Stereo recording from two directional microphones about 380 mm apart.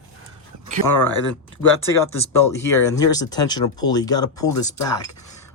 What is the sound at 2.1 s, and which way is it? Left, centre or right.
Speech, centre.